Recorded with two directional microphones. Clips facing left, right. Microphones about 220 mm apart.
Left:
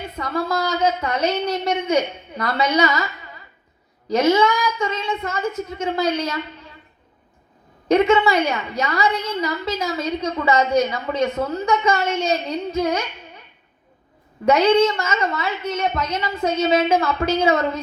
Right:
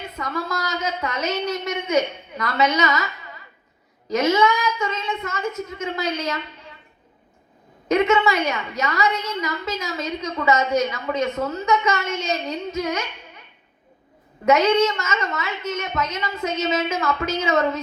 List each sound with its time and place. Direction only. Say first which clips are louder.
0.2 s a woman's voice: left 5 dB; 30° left (ahead or behind)
4.1 s a woman's voice: left 2 dB; 30° left (ahead or behind)
7.9 s a woman's voice: left 3 dB; 30° left (ahead or behind)
14.4 s a woman's voice: left 2 dB; 30° left (ahead or behind)